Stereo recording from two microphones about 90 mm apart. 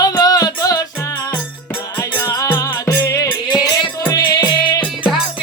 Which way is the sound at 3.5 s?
50° left (ahead or behind).